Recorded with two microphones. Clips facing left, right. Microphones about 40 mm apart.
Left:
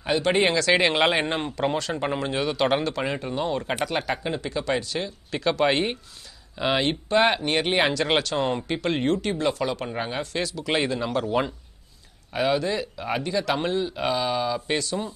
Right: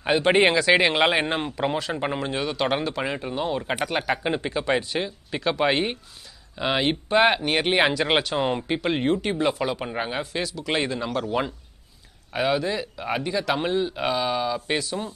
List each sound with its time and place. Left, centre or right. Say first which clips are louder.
0.0 s speech: right 3 dB; right
0.6 s speech: right 2 dB; centre
0.8 s speech: right 1 dB; centre
4.2 s speech: right 2 dB; right
5.3 s a man's voice: left 1 dB; centre